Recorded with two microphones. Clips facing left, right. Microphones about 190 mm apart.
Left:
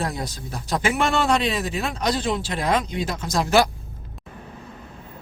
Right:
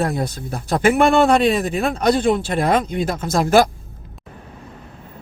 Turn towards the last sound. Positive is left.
turn(degrees=-50)  # may be behind; listen again after turning